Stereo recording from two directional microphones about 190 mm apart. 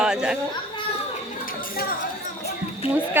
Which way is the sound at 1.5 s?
50° left (ahead or behind).